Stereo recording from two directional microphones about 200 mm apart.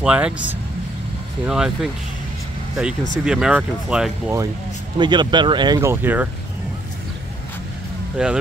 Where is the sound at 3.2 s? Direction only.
5° right (ahead or behind).